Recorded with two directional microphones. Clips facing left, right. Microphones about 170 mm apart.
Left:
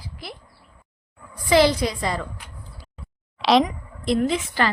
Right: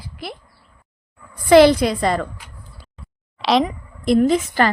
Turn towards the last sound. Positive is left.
turn(degrees=-45)  # may be behind; listen again after turning